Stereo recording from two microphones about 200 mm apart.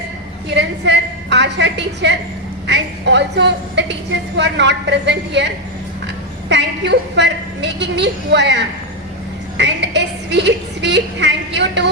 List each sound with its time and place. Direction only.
0.5 s a woman's voice: 60° right (ahead or behind)
6.5 s a woman's voice: 60° right (ahead or behind)